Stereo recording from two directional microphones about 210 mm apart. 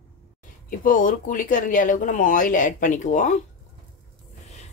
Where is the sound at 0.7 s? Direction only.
40° left (ahead or behind).